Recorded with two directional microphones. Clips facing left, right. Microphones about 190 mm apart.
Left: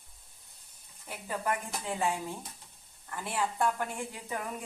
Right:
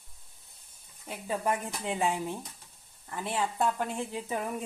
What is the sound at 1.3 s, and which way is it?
A woman's voice, 20° right (ahead or behind).